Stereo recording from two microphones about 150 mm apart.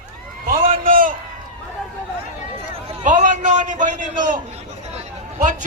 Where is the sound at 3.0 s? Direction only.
55° right (ahead or behind).